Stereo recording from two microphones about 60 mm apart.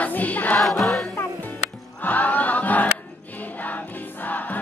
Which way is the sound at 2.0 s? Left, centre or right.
Left.